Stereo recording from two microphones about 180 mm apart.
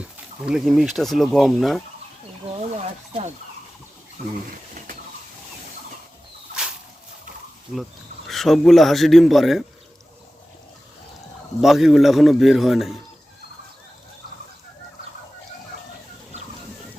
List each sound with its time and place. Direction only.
0.0 s speech: 5° right (ahead or behind)
8.3 s speech: centre (ahead or behind)
11.6 s speech: centre (ahead or behind)